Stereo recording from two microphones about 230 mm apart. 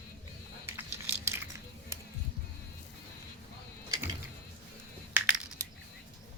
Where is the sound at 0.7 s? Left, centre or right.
Centre.